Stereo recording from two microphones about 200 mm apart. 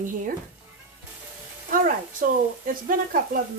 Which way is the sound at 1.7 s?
45° right (ahead or behind).